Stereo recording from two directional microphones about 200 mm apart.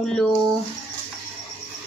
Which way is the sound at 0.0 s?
5° left (ahead or behind).